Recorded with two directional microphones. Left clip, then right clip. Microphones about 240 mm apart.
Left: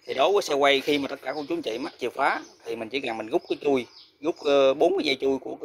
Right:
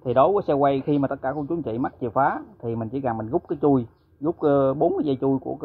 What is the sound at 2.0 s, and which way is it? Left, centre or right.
Speech, left.